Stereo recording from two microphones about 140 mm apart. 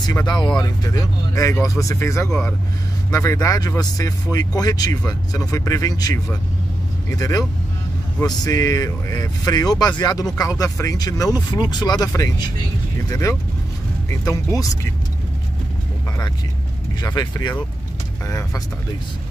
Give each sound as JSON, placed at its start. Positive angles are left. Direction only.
{"t": 0.0, "sound": "speech", "side_deg": 30}
{"t": 17.0, "sound": "speech", "side_deg": 30}